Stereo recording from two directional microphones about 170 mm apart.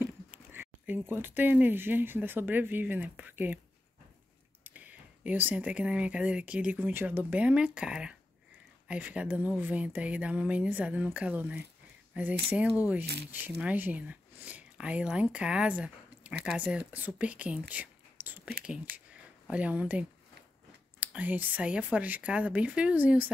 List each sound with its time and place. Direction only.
0.0 s speech: 10° right (ahead or behind)
4.6 s speech: 10° right (ahead or behind)
13.0 s speech: 75° right (ahead or behind)
13.3 s speech: 10° right (ahead or behind)